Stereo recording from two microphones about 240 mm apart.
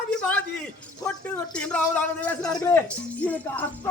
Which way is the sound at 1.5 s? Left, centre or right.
Centre.